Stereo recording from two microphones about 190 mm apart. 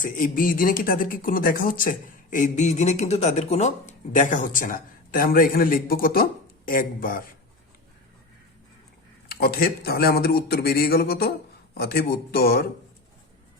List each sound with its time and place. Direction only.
0.0 s speech: 45° left (ahead or behind)
9.3 s speech: 55° left (ahead or behind)